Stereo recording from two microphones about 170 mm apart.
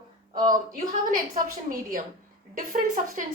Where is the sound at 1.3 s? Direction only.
55° right (ahead or behind).